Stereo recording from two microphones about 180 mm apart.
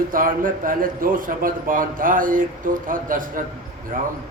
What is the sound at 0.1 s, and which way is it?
A man's voice, 50° right (ahead or behind).